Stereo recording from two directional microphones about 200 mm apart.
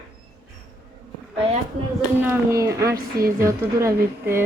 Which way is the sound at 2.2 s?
15° right (ahead or behind).